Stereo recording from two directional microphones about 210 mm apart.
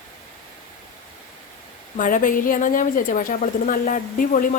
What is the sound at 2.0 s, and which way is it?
A woman's voice, 40° left (ahead or behind).